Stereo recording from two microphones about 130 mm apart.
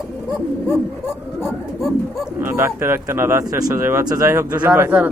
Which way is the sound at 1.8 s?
Centre (ahead or behind).